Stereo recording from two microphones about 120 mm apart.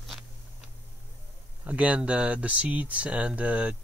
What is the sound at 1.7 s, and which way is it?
Speech, 10° right (ahead or behind).